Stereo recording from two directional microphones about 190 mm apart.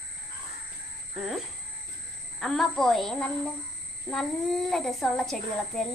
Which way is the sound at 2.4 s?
Centre (ahead or behind).